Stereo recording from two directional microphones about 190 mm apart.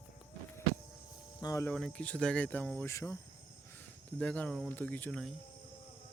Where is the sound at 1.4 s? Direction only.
15° left (ahead or behind).